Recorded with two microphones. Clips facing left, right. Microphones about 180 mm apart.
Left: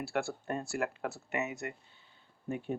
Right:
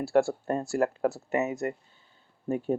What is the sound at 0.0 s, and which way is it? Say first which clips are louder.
Speech: right 11 dB; 40° right (ahead or behind).